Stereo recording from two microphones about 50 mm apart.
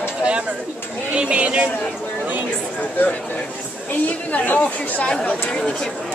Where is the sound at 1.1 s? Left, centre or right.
Right.